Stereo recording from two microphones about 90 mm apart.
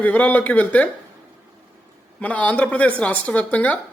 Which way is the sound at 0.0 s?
15° left (ahead or behind).